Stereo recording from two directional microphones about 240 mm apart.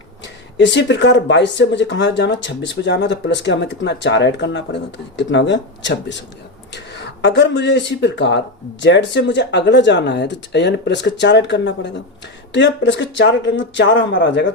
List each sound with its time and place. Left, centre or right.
0.6 s speech: left